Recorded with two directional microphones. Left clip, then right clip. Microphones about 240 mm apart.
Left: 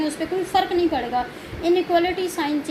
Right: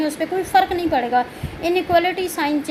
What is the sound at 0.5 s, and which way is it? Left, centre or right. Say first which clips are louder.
A woman's voice: right 4 dB; right.